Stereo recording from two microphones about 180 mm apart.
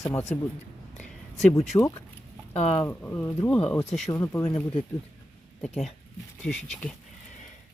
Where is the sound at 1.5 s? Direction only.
15° left (ahead or behind).